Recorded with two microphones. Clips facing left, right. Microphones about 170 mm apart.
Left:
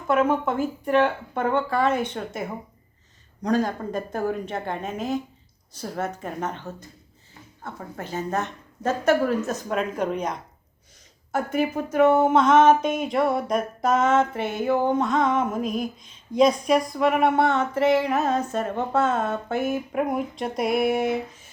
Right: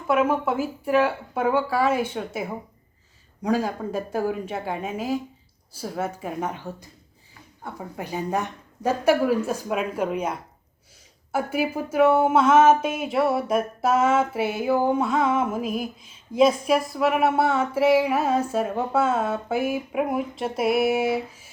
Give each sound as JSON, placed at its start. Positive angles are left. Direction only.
{"t": 0.1, "sound": "speech", "side_deg": -5}